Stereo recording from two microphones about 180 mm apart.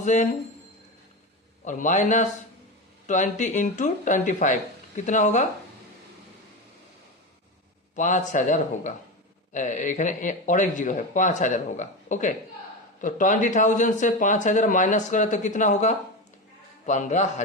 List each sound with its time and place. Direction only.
0.0 s speech: 40° left (ahead or behind)
1.6 s a man's voice: 45° left (ahead or behind)
7.9 s a man's voice: 45° left (ahead or behind)